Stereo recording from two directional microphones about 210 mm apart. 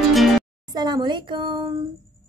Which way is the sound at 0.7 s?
20° right (ahead or behind).